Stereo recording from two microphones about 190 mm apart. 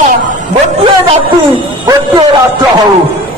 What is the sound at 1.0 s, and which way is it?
Music, 25° right (ahead or behind).